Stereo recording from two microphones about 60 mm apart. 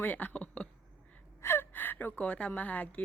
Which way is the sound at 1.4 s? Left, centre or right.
Left.